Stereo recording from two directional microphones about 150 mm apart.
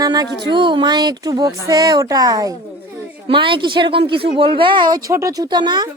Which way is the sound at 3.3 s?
35° right (ahead or behind).